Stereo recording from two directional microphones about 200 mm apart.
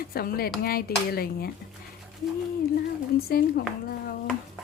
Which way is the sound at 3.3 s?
50° left (ahead or behind).